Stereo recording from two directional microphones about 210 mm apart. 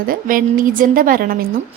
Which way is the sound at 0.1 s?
40° right (ahead or behind).